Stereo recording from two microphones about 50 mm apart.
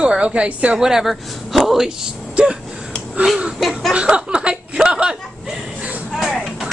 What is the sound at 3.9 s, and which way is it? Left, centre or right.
Chuckle, right.